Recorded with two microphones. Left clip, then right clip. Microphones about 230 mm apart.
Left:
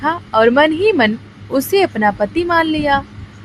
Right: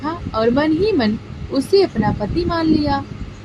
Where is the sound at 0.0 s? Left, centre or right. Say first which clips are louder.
Left 6 dB; left.